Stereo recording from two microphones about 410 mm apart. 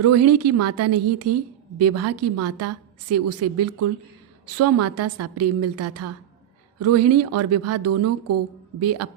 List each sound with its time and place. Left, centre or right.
0.0 s a woman's voice: right